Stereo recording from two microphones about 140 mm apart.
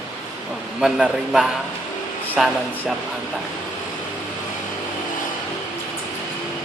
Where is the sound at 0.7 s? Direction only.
5° right (ahead or behind).